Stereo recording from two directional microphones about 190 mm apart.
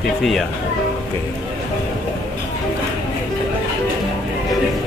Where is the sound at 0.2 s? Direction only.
Centre (ahead or behind).